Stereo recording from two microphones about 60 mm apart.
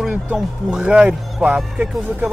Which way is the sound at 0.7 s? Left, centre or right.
Centre.